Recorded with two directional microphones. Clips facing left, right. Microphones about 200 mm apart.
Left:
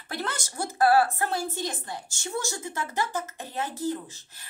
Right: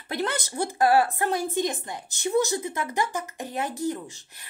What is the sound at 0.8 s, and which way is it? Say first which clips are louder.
A woman's voice: even; 15° right (ahead or behind).